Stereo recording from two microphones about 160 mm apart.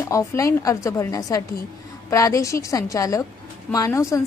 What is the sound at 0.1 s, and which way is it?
A woman's voice, 20° left (ahead or behind).